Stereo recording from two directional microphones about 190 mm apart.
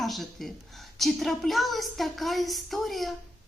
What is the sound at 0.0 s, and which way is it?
A woman's voice, centre (ahead or behind).